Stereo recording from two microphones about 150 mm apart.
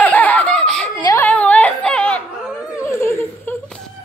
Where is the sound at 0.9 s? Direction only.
25° left (ahead or behind).